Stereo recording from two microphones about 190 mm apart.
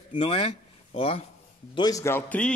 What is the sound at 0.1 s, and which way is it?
Speech, 30° left (ahead or behind).